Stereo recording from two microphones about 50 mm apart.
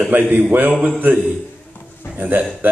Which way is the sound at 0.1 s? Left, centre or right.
Right.